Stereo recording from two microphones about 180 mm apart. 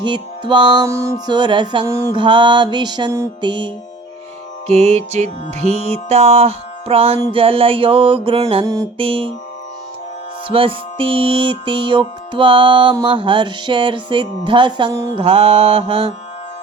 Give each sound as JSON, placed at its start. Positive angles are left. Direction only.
{"t": 0.0, "sound": "music", "side_deg": -25}
{"t": 4.7, "sound": "music", "side_deg": -35}
{"t": 8.6, "sound": "music", "side_deg": -20}
{"t": 9.0, "sound": "music", "side_deg": -30}
{"t": 10.5, "sound": "music", "side_deg": -30}
{"t": 15.1, "sound": "music", "side_deg": -35}